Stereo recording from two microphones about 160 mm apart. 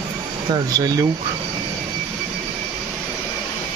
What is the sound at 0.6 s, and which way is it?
Speech, 25° right (ahead or behind).